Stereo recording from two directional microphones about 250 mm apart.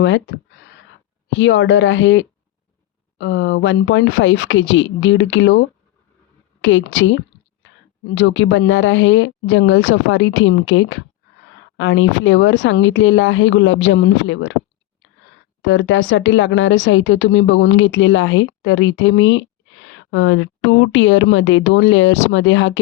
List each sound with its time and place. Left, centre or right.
0.0 s a woman's voice: left
15.6 s a woman's voice: left